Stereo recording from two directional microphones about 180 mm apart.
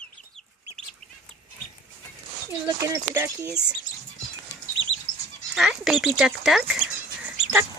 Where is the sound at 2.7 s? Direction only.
20° right (ahead or behind).